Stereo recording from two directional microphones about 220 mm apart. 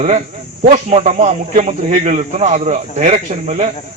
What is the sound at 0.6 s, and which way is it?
A man's voice, 35° right (ahead or behind).